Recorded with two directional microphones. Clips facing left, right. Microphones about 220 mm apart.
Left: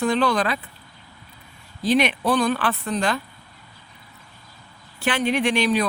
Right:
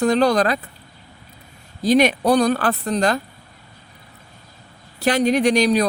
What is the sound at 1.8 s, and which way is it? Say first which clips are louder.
Speech: right 4 dB; 40° right (ahead or behind).